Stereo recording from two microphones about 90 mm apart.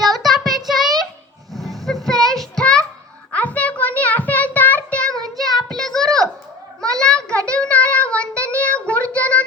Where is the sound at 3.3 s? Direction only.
15° left (ahead or behind).